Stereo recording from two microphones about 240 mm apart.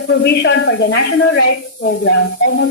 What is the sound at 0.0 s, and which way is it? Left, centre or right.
A woman's voice, left.